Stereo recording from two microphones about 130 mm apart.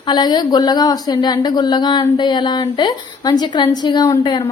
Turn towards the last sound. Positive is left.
turn(degrees=35)  # may be behind; listen again after turning